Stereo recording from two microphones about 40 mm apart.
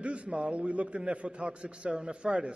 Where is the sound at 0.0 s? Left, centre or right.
Right.